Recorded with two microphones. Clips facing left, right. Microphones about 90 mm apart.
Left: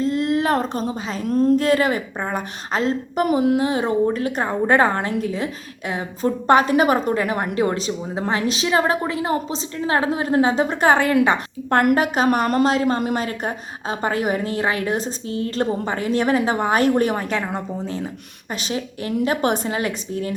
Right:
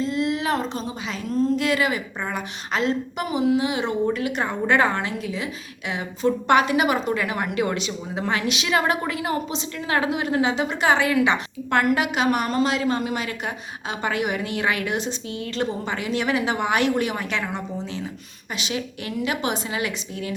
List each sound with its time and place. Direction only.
0.0 s speech: 45° left (ahead or behind)
3.2 s a woman's voice: 55° left (ahead or behind)